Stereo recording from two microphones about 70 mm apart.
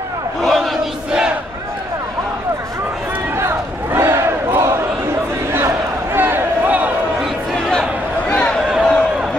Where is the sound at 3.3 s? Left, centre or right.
Right.